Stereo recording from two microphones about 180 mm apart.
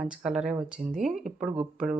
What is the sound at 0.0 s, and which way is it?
Speech, 5° right (ahead or behind).